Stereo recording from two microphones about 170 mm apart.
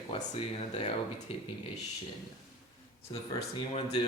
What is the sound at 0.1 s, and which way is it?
Speech, 35° left (ahead or behind).